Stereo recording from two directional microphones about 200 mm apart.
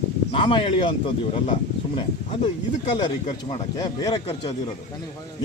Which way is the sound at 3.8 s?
20° left (ahead or behind).